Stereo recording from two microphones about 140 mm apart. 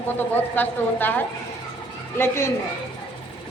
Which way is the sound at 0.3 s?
15° left (ahead or behind).